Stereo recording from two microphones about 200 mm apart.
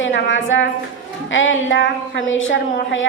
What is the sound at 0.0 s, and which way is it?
A woman's voice, 70° left (ahead or behind).